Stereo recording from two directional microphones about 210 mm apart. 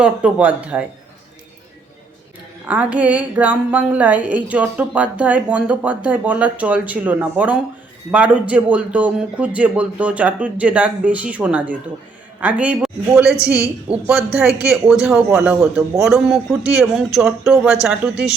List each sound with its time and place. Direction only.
0.0 s a woman's voice: 5° right (ahead or behind)
2.6 s a woman's voice: 5° right (ahead or behind)
13.9 s speech: 25° right (ahead or behind)
14.3 s a man's voice: centre (ahead or behind)